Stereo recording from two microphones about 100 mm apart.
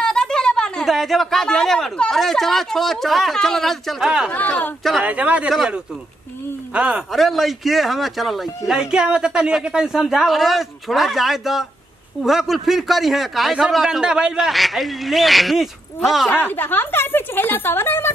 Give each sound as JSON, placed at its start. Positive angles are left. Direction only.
{"t": 0.0, "sound": "speech", "side_deg": 10}
{"t": 4.3, "sound": "speech", "side_deg": 15}
{"t": 5.0, "sound": "speech", "side_deg": -15}
{"t": 6.7, "sound": "a man's voice", "side_deg": -10}
{"t": 7.1, "sound": "speech", "side_deg": 0}
{"t": 16.3, "sound": "speech", "side_deg": 20}